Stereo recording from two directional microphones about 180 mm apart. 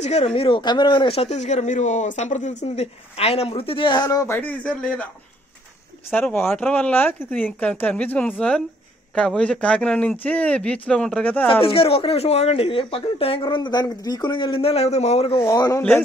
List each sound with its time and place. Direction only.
0.0 s speech: 35° left (ahead or behind); by 5.0 s 5° left (ahead or behind)
6.0 s speech: 10° left (ahead or behind)
11.6 s speech: 30° left (ahead or behind)
15.4 s a man's voice: 20° left (ahead or behind)